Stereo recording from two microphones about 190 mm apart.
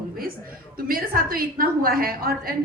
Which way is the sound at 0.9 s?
50° right (ahead or behind).